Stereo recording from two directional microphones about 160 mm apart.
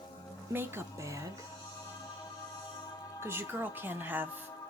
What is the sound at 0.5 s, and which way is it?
Speech, 15° right (ahead or behind).